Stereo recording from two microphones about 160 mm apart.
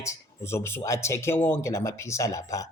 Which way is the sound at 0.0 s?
15° left (ahead or behind).